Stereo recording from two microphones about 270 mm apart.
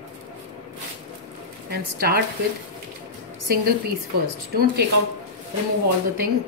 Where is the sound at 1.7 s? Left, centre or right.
Right.